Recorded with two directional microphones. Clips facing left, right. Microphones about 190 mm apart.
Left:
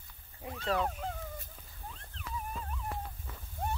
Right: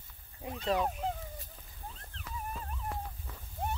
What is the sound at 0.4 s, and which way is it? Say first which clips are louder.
Dog: right 1 dB; 20° right (ahead or behind).